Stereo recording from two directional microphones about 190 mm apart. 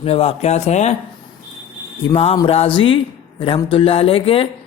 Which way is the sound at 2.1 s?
30° left (ahead or behind).